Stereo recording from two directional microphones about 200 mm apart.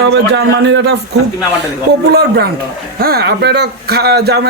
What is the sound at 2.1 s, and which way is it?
Speech, 55° right (ahead or behind).